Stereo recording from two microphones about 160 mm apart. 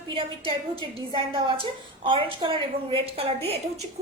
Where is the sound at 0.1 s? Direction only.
35° right (ahead or behind).